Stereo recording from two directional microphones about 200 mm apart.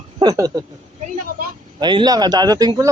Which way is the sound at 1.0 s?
45° right (ahead or behind).